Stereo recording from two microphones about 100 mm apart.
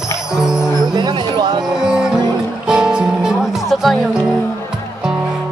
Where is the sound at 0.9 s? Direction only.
45° right (ahead or behind).